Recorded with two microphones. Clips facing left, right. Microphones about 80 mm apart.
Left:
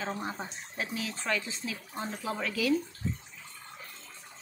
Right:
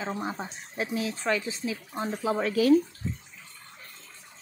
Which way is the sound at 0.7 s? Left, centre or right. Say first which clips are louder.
Right 6 dB; right.